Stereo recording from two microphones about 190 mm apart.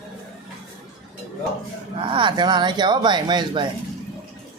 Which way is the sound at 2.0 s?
25° right (ahead or behind).